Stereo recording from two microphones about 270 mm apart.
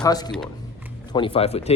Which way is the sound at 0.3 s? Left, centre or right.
Centre.